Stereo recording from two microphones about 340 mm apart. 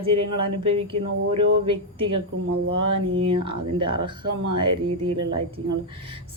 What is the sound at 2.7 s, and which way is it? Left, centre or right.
Speech, right.